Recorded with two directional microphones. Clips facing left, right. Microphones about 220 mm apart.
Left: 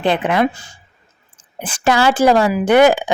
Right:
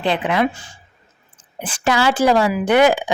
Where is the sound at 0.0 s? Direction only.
50° left (ahead or behind).